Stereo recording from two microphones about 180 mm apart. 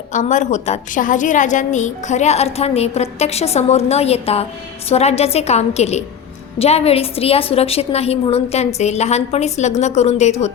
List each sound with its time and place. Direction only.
0.1 s a woman's voice: 45° left (ahead or behind)